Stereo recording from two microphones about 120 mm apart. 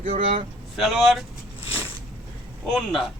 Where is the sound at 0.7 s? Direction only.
Centre (ahead or behind).